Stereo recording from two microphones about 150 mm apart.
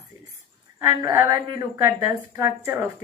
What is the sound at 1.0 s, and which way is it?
Speech, 20° right (ahead or behind).